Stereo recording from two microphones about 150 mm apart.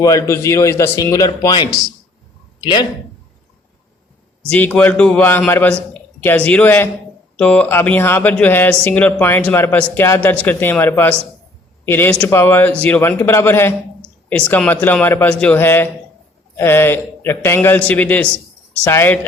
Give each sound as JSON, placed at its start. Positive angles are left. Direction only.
{"t": 0.0, "sound": "a man's voice", "side_deg": 20}
{"t": 4.4, "sound": "a man's voice", "side_deg": 10}